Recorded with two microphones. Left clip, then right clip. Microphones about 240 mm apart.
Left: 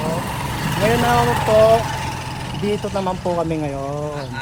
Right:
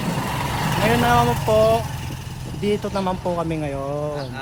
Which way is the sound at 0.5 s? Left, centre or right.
Right.